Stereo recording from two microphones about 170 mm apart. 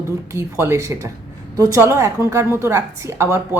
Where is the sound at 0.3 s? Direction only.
15° right (ahead or behind).